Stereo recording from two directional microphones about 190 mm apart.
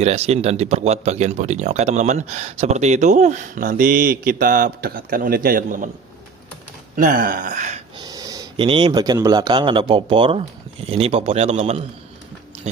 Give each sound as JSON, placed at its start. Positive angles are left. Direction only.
{"t": 0.0, "sound": "speech", "side_deg": -35}
{"t": 7.0, "sound": "speech", "side_deg": -45}
{"t": 8.0, "sound": "speech", "side_deg": -20}